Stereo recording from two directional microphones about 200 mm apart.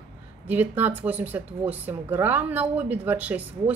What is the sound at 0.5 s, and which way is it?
Speech, 10° right (ahead or behind).